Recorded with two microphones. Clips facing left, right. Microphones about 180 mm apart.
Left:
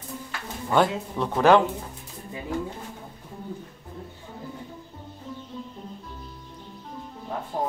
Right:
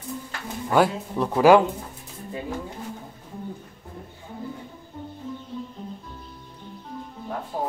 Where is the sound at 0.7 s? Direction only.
5° right (ahead or behind).